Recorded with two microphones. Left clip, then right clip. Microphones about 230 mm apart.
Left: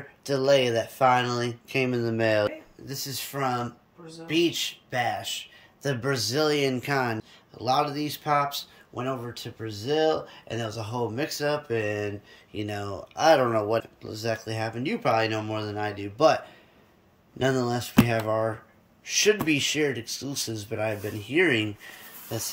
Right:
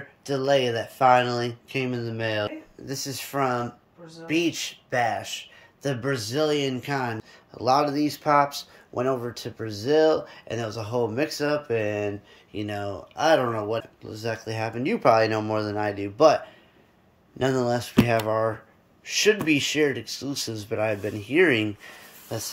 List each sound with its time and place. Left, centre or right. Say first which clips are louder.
0.2 s speech: left 1 dB; centre
2.8 s speech: right 2 dB; centre
5.8 s speech: even; centre
7.5 s speech: right 3 dB; centre